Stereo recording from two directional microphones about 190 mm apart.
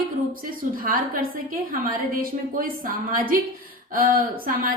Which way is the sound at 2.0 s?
50° right (ahead or behind).